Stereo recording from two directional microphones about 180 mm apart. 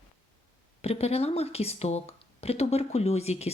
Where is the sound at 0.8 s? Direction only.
35° left (ahead or behind).